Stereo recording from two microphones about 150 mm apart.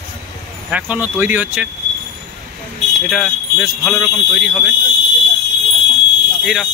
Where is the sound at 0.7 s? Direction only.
10° right (ahead or behind).